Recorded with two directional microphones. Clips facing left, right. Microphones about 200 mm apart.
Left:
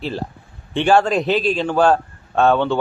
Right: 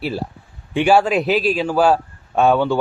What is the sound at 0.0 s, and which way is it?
A man's voice, 10° right (ahead or behind).